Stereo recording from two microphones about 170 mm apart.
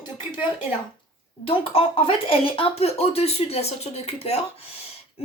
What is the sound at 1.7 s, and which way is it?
Speech, 35° left (ahead or behind).